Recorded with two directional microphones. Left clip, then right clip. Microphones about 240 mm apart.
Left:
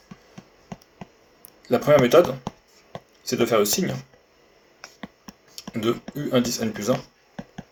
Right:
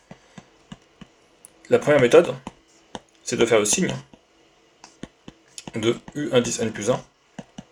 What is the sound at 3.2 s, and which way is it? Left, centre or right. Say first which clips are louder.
Speech: right 2 dB; right.